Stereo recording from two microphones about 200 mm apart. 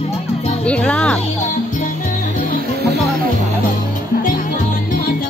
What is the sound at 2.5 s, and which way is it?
Music, 50° right (ahead or behind).